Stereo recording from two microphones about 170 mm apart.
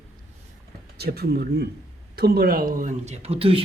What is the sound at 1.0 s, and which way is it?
Speech, 70° right (ahead or behind).